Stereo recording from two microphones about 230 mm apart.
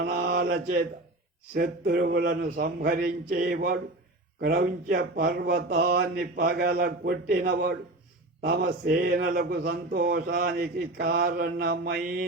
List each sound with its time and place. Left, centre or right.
0.0 s mantra: right
1.5 s a man's voice: right